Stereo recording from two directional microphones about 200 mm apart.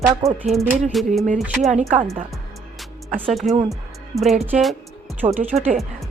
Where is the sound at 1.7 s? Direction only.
35° right (ahead or behind).